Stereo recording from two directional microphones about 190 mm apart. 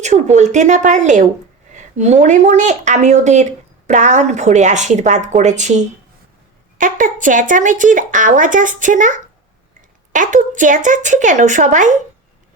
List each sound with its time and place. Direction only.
0.0 s speech: 40° right (ahead or behind)